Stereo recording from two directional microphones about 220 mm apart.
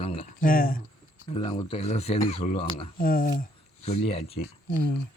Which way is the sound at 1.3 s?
25° left (ahead or behind).